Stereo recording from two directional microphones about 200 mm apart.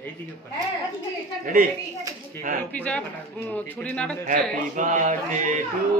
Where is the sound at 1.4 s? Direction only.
45° right (ahead or behind).